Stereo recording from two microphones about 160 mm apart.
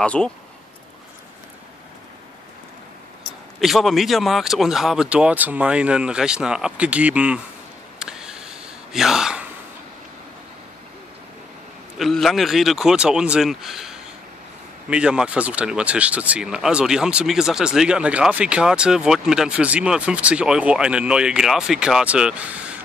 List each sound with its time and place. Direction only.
0.0 s speech: 5° left (ahead or behind)
3.6 s speech: centre (ahead or behind)
8.0 s gasp: 5° right (ahead or behind)
12.0 s speech: centre (ahead or behind)